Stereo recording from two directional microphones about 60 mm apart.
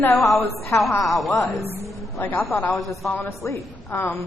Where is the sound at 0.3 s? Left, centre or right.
Left.